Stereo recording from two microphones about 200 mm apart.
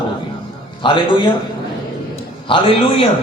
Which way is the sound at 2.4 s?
25° left (ahead or behind).